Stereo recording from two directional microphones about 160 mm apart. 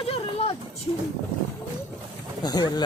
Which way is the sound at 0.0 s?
35° left (ahead or behind).